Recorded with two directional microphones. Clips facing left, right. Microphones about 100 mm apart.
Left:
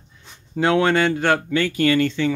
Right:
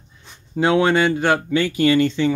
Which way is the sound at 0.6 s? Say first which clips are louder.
Right 1 dB; 15° right (ahead or behind).